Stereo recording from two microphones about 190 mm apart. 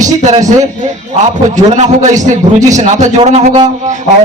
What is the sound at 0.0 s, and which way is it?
Speech, 40° right (ahead or behind).